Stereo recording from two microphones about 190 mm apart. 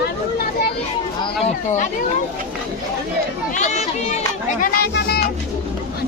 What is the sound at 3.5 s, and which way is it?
Speech, 40° left (ahead or behind).